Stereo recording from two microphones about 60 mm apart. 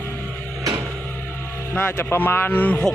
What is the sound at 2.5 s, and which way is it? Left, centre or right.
Speech, left.